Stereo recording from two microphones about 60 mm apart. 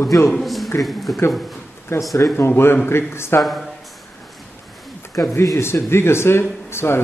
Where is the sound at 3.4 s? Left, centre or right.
Centre.